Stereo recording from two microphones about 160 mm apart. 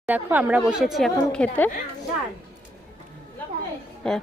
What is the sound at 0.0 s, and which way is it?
Speech, 10° right (ahead or behind).